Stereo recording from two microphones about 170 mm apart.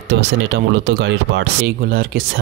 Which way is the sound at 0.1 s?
80° right.